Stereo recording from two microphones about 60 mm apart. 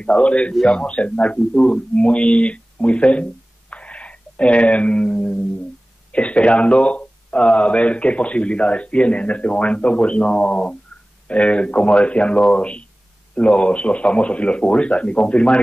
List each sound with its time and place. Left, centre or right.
0.0 s speech: centre